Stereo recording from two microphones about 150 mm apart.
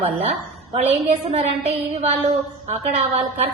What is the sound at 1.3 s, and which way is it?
A woman's voice, 45° right (ahead or behind).